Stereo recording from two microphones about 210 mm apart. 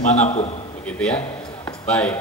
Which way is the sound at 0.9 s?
5° left (ahead or behind).